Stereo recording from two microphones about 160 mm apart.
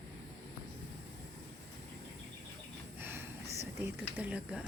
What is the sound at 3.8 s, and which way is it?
Speech, 10° right (ahead or behind).